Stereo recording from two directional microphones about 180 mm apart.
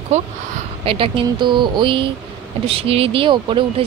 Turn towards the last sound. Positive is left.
turn(degrees=-30)  # may be behind; listen again after turning